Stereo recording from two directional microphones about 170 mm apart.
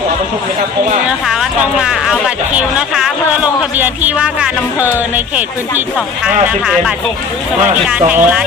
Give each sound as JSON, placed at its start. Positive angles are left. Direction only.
{"t": 1.2, "sound": "speech", "side_deg": -5}
{"t": 4.8, "sound": "music", "side_deg": -10}
{"t": 6.2, "sound": "speech", "side_deg": 0}
{"t": 8.1, "sound": "music", "side_deg": -10}